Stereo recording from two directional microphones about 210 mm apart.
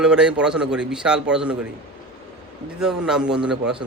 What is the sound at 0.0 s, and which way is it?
A man's voice, 5° right (ahead or behind).